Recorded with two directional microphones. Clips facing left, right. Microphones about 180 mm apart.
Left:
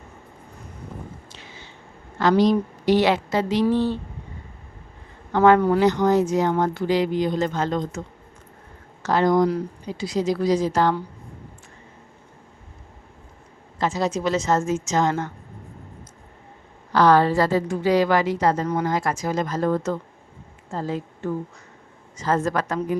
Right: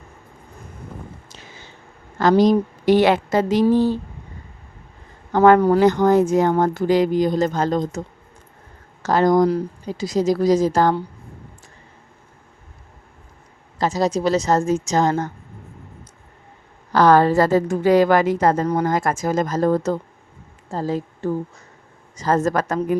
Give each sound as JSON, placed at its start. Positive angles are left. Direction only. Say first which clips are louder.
{"t": 1.3, "sound": "a sound", "louder": "right 1 dB", "side_deg": -45}
{"t": 2.1, "sound": "a woman's voice", "louder": "right 3 dB", "side_deg": -45}
{"t": 5.3, "sound": "a woman's voice", "louder": "right 3 dB", "side_deg": -45}
{"t": 9.0, "sound": "a woman's voice", "louder": "right 3 dB", "side_deg": -40}
{"t": 13.7, "sound": "a woman's voice", "louder": "right 4 dB", "side_deg": -40}
{"t": 16.9, "sound": "a woman's voice", "louder": "right 3 dB", "side_deg": -45}